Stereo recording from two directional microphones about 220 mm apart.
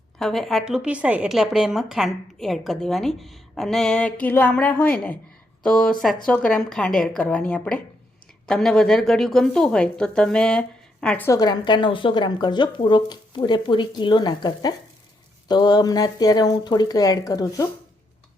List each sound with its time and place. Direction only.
0.2 s a woman's voice: centre (ahead or behind); by 17.7 s 15° left (ahead or behind)